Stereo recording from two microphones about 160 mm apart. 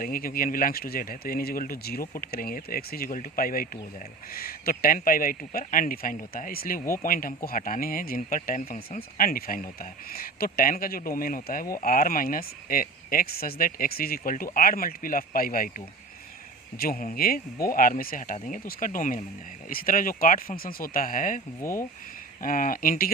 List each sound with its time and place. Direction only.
0.0 s speech: 65° left (ahead or behind)
8.4 s speech: 50° left (ahead or behind)
9.0 s speech: 65° left (ahead or behind)
16.7 s speech: 70° left (ahead or behind)
21.6 s speech: 15° left (ahead or behind)
22.4 s speech: 60° left (ahead or behind)